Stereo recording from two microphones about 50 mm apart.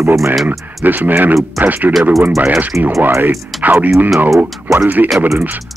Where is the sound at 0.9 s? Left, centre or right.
Right.